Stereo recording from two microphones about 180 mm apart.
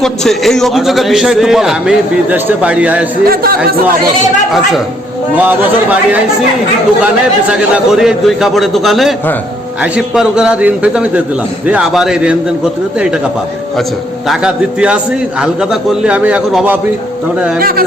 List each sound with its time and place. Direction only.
0.0 s a man's voice: centre (ahead or behind)
3.2 s a man's voice: 55° right (ahead or behind)
5.4 s a man's voice: 10° right (ahead or behind)
7.5 s a man's voice: 5° right (ahead or behind)
14.3 s a man's voice: 5° right (ahead or behind)
17.6 s a man's voice: 55° right (ahead or behind)